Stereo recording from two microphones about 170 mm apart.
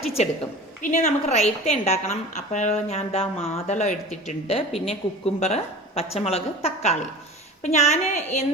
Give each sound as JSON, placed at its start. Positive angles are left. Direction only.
{"t": 0.2, "sound": "a woman's voice", "side_deg": 40}